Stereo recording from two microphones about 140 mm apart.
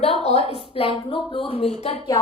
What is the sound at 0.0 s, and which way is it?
A woman's voice, 45° left (ahead or behind).